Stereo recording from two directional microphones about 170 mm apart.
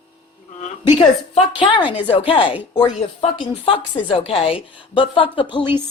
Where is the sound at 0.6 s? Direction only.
35° left (ahead or behind).